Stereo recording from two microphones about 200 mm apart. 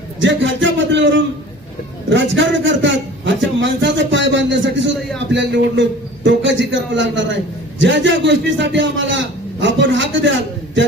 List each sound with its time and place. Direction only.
0.2 s a man's voice: 65° right (ahead or behind)